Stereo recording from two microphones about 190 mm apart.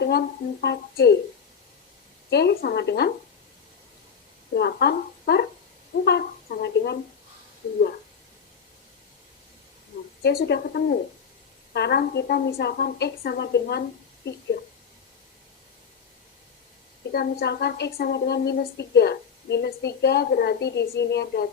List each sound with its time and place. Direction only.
0.0 s a woman's voice: 60° left (ahead or behind)
2.3 s a woman's voice: 60° left (ahead or behind)
4.5 s a woman's voice: 60° left (ahead or behind)
10.2 s a woman's voice: 60° left (ahead or behind)
17.1 s a woman's voice: 55° left (ahead or behind)